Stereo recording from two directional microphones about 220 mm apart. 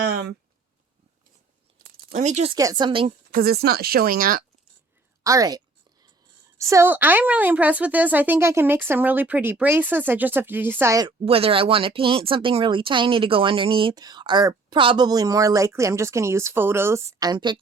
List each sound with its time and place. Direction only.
2.1 s speech: 30° right (ahead or behind)
2.6 s speech: 15° right (ahead or behind)
3.3 s speech: 45° right (ahead or behind)
5.2 s a sound: 15° right (ahead or behind)
6.6 s a woman's voice: 15° right (ahead or behind)
11.3 s speech: 25° right (ahead or behind)